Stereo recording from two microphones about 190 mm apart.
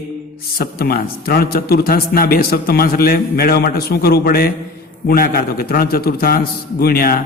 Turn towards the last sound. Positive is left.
turn(degrees=50)  # may be behind; listen again after turning